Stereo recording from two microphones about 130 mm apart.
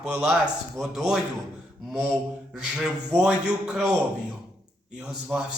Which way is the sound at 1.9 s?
20° right (ahead or behind).